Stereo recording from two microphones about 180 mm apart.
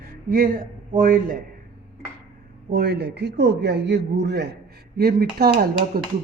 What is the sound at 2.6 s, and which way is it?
A man's voice, 60° right (ahead or behind).